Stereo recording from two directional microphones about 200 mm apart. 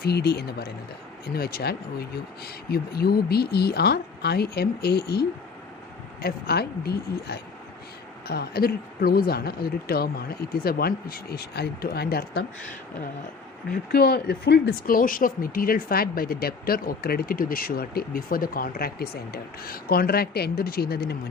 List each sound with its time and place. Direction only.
0.0 s speech: 55° left (ahead or behind)
6.2 s speech: 50° left (ahead or behind)
13.7 s speech: 50° left (ahead or behind)